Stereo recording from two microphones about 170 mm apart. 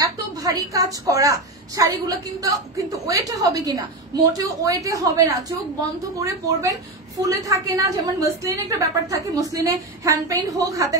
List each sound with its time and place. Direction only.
0.0 s a woman's voice: 20° right (ahead or behind)